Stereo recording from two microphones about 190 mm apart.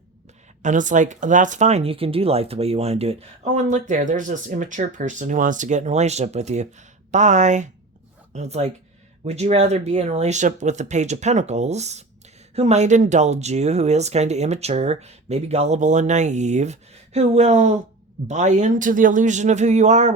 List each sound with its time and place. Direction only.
0.6 s speech: 40° right (ahead or behind)